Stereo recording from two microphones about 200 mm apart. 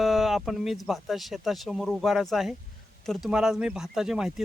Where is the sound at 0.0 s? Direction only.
Centre (ahead or behind).